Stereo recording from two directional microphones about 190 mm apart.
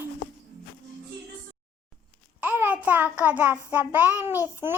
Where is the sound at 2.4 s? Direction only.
10° right (ahead or behind).